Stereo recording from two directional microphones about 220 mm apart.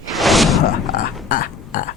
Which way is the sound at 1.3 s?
40° left (ahead or behind).